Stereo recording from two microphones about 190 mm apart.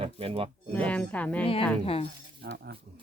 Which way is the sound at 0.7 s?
10° left (ahead or behind).